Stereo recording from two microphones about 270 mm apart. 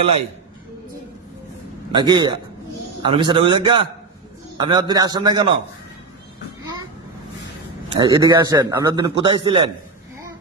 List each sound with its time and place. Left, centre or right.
1.9 s a man's voice: centre
7.9 s a man's voice: centre